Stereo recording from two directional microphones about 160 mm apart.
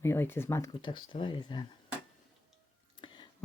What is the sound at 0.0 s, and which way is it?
Speech, 15° left (ahead or behind).